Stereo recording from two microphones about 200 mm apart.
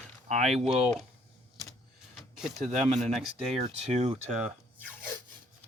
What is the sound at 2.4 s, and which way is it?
Speech, centre (ahead or behind).